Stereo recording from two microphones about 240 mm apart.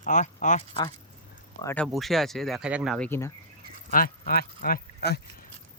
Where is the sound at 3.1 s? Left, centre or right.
Centre.